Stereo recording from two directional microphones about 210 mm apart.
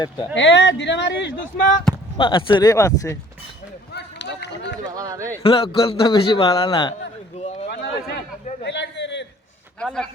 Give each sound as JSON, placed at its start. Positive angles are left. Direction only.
{"t": 0.3, "sound": "speech", "side_deg": 55}
{"t": 2.1, "sound": "a man's voice", "side_deg": 25}
{"t": 3.9, "sound": "run", "side_deg": 55}
{"t": 4.9, "sound": "a man's voice", "side_deg": -15}
{"t": 5.4, "sound": "a man's voice", "side_deg": 25}
{"t": 7.3, "sound": "a sound", "side_deg": 30}
{"t": 7.7, "sound": "a sound", "side_deg": 50}
{"t": 9.8, "sound": "speech", "side_deg": 0}